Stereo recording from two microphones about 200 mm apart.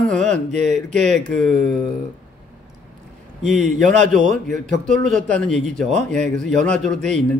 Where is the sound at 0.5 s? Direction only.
35° right (ahead or behind).